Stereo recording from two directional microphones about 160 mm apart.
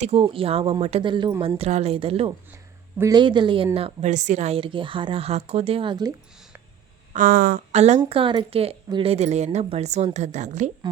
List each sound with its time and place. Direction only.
0.0 s speech: 35° right (ahead or behind)
1.0 s speech: 30° right (ahead or behind)
3.8 s speech: 40° right (ahead or behind); by 6.1 s 25° right (ahead or behind)
7.1 s speech: 60° right (ahead or behind)
7.7 s a woman's voice: 45° right (ahead or behind)